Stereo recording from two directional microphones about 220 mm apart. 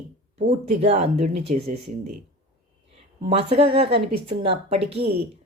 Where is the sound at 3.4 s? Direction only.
25° right (ahead or behind).